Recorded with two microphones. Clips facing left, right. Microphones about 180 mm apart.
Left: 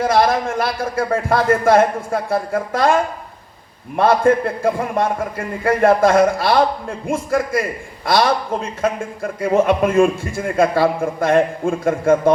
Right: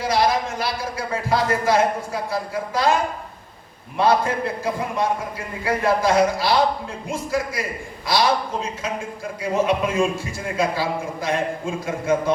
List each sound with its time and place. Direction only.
0.0 s a man's voice: 55° left (ahead or behind)